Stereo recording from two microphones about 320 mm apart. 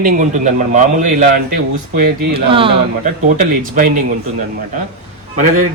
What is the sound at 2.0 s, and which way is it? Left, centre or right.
Speech, right.